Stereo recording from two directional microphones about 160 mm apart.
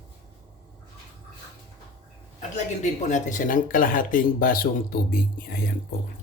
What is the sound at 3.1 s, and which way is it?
Speech, 55° left (ahead or behind).